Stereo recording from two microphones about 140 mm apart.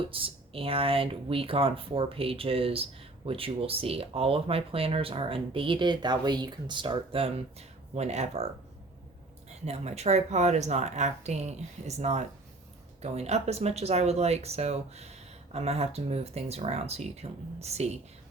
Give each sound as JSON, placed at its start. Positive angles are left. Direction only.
{"t": 0.0, "sound": "speech", "side_deg": -40}
{"t": 9.6, "sound": "speech", "side_deg": -50}